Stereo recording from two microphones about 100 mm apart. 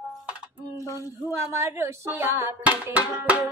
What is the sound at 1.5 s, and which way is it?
Speech, 25° right (ahead or behind).